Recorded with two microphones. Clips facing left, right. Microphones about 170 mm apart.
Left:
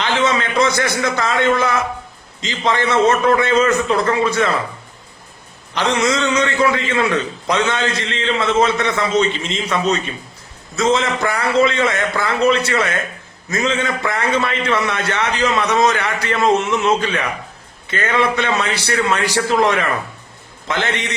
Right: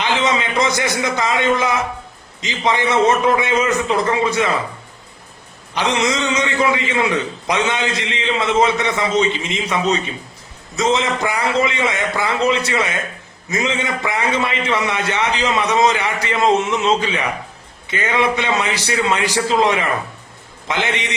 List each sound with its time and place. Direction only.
0.0 s a man's voice: 15° right (ahead or behind)
5.7 s a man's voice: 15° right (ahead or behind)